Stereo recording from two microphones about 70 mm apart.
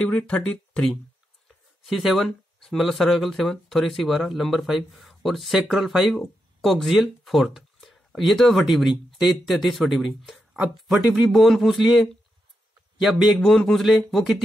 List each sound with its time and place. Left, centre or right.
0.0 s speech: centre
1.9 s speech: centre